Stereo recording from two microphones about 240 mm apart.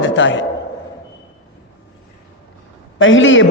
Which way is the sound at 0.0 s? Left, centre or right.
Left.